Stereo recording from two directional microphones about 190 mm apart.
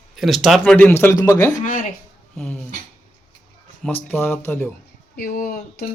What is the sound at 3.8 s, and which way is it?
Speech, 10° left (ahead or behind).